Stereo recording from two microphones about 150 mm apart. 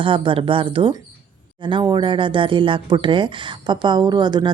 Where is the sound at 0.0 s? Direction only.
35° right (ahead or behind).